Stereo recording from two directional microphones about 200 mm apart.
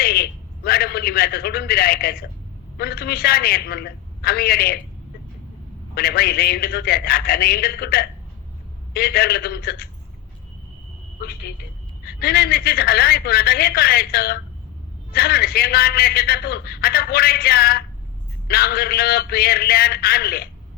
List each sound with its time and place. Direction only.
0.0 s a man's voice: 50° left (ahead or behind)
5.9 s a man's voice: 50° left (ahead or behind)
11.2 s a man's voice: 50° left (ahead or behind)